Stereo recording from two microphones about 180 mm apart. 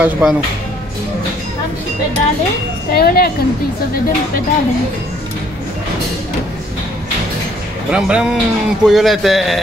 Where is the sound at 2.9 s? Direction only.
60° left (ahead or behind).